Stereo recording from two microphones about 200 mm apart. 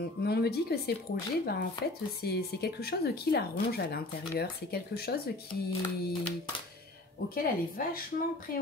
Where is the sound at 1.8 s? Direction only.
50° left (ahead or behind).